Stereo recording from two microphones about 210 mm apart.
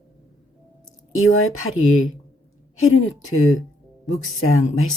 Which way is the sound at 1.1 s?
75° left (ahead or behind).